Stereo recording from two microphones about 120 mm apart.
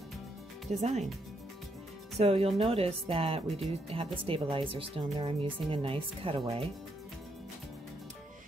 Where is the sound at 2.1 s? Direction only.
55° right (ahead or behind).